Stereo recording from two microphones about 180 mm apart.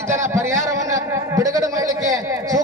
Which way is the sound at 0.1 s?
15° right (ahead or behind).